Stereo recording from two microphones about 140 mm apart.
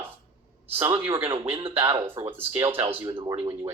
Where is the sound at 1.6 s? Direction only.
40° right (ahead or behind).